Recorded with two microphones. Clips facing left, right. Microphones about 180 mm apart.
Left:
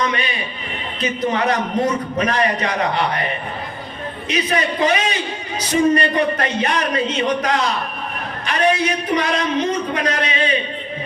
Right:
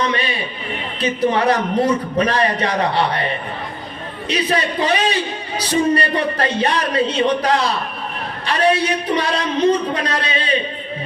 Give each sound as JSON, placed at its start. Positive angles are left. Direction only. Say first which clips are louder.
{"t": 0.0, "sound": "a sound", "louder": "right 1 dB", "side_deg": -30}
{"t": 1.0, "sound": "a man's voice", "louder": "right 3 dB", "side_deg": -30}
{"t": 4.3, "sound": "a man's voice", "louder": "right 1 dB", "side_deg": -35}